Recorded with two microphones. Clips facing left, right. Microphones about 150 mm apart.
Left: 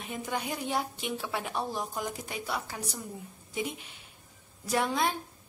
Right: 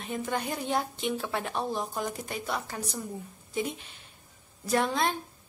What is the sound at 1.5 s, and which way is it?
Speech, 15° right (ahead or behind).